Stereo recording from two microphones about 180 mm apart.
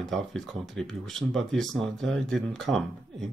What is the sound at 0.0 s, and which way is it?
Speech, centre (ahead or behind).